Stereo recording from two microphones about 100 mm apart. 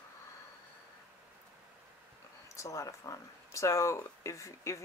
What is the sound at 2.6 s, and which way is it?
Speech, 30° left (ahead or behind).